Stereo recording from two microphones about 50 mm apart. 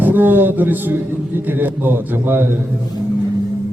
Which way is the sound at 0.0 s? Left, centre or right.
Right.